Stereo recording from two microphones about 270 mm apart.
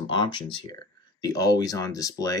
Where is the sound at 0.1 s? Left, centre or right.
Centre.